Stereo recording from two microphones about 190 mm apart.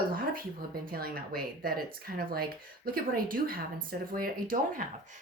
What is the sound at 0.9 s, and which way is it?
Speech, 50° right (ahead or behind).